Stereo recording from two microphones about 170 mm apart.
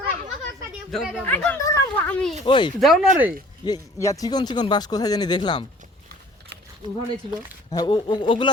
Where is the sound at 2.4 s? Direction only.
25° left (ahead or behind).